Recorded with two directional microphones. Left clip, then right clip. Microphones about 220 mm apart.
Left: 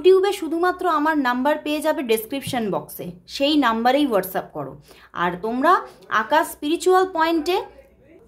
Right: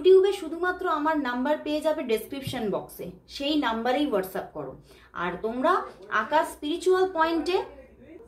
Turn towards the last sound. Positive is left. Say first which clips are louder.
# left 4 dB
turn(degrees=40)  # may be behind; listen again after turning